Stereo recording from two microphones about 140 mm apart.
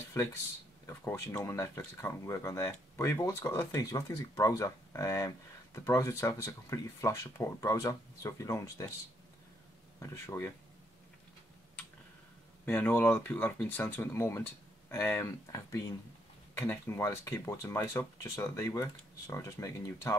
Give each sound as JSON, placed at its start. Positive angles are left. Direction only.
{"t": 0.1, "sound": "speech", "side_deg": 20}
{"t": 9.9, "sound": "speech", "side_deg": 20}
{"t": 12.6, "sound": "speech", "side_deg": 15}